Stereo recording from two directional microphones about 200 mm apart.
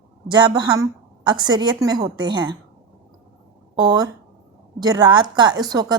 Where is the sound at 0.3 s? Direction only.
20° right (ahead or behind).